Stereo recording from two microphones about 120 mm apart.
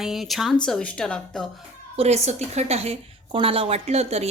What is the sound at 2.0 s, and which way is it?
A woman's voice, 65° right (ahead or behind).